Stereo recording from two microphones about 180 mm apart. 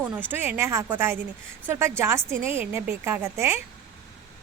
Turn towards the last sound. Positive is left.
turn(degrees=-15)  # may be behind; listen again after turning